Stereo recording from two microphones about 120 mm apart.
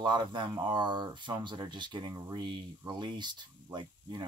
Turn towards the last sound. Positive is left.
turn(degrees=-40)  # may be behind; listen again after turning